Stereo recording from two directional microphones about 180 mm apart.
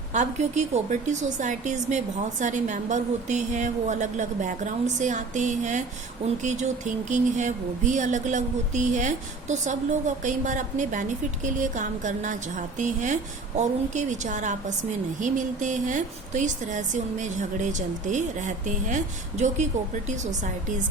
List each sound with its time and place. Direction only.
0.1 s a woman's voice: 40° right (ahead or behind)